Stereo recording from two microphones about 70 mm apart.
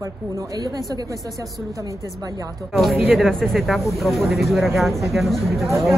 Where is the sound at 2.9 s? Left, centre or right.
Right.